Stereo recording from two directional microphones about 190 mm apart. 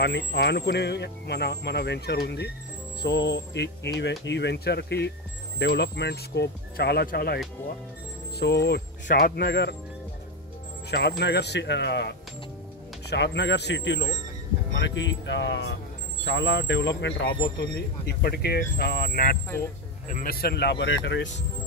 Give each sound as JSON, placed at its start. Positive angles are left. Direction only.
{"t": 0.0, "sound": "speech", "side_deg": 60}
{"t": 8.4, "sound": "speech", "side_deg": 60}
{"t": 10.9, "sound": "speech", "side_deg": 60}
{"t": 19.5, "sound": "speech", "side_deg": 10}
{"t": 20.1, "sound": "speech", "side_deg": 50}